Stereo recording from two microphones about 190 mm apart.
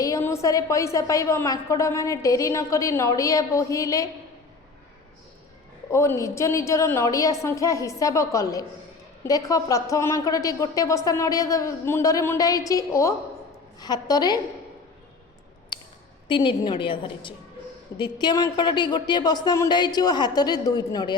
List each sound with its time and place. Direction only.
0.0 s a woman's voice: 15° left (ahead or behind)
5.9 s a woman's voice: 15° left (ahead or behind)
16.3 s a woman's voice: 25° left (ahead or behind)